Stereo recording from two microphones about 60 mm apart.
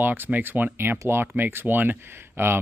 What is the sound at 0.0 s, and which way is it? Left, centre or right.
Speech, right.